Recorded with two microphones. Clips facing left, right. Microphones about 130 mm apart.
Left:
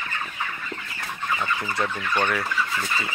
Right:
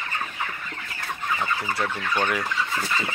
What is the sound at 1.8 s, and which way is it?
Fowl, 5° right (ahead or behind).